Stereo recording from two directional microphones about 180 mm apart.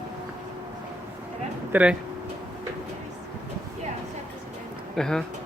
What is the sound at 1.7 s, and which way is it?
Speech, 5° right (ahead or behind).